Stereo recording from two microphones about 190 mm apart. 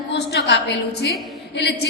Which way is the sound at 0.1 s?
60° left (ahead or behind).